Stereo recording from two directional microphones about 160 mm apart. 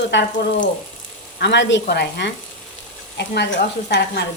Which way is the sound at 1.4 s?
90° left.